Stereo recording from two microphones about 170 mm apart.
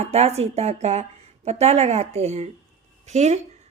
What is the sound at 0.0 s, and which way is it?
A woman's voice, 40° right (ahead or behind).